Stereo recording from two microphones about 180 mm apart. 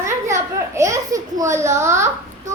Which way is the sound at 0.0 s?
15° right (ahead or behind).